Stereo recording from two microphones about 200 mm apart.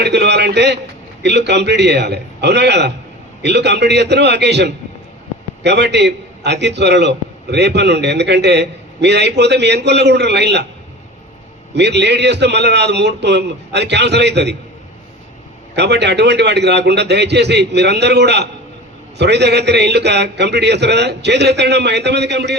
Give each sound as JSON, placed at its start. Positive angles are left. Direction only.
{"t": 0.0, "sound": "a man's voice", "side_deg": -55}
{"t": 11.7, "sound": "a man's voice", "side_deg": -60}
{"t": 15.7, "sound": "a man's voice", "side_deg": -60}